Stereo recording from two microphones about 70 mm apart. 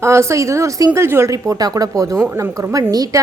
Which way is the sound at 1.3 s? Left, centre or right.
Right.